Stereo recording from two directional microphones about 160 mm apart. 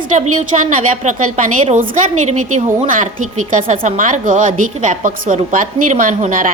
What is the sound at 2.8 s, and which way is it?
A woman's voice, 55° right (ahead or behind).